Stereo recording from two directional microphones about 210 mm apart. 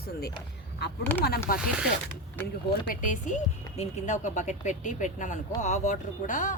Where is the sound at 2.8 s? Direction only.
35° left (ahead or behind).